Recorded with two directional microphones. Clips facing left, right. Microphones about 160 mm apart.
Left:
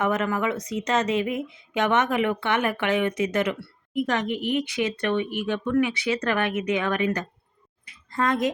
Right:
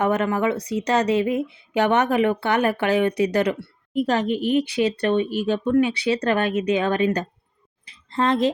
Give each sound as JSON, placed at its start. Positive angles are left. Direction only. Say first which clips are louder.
{"t": 0.0, "sound": "speech", "louder": "right 4 dB", "side_deg": -30}